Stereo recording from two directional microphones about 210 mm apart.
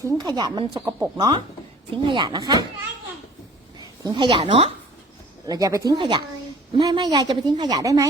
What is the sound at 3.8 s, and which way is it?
Speech, 20° right (ahead or behind).